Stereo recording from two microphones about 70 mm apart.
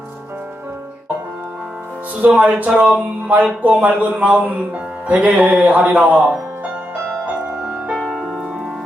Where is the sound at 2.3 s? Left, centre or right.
Right.